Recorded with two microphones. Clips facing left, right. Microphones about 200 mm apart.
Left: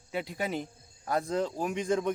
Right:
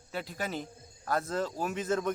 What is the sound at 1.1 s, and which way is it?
Speech, 15° left (ahead or behind).